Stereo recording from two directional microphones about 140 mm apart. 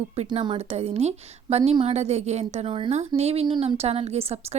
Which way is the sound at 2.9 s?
50° right (ahead or behind).